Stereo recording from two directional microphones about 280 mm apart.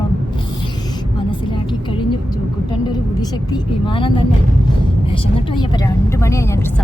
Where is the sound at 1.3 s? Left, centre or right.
Centre.